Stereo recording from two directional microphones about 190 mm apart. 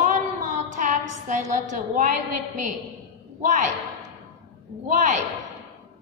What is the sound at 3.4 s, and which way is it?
Speech, 40° right (ahead or behind).